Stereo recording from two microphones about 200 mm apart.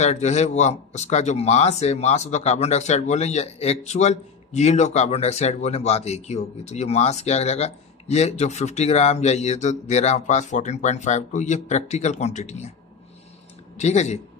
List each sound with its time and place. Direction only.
0.0 s speech: 35° left (ahead or behind)
13.7 s speech: 35° left (ahead or behind)